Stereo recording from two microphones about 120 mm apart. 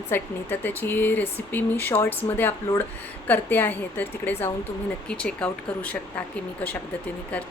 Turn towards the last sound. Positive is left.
turn(degrees=10)  # may be behind; listen again after turning